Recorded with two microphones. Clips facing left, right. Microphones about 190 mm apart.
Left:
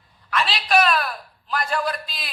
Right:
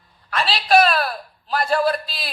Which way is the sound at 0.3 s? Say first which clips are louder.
Right 4 dB; 35° right (ahead or behind).